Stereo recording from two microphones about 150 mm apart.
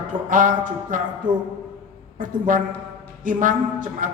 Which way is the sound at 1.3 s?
30° right (ahead or behind).